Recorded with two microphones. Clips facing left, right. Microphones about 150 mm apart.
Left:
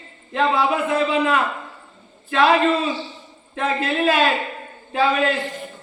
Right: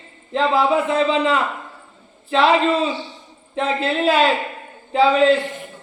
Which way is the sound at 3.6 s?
25° right (ahead or behind).